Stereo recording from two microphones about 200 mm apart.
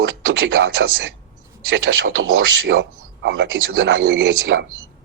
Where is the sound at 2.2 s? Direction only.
85° right.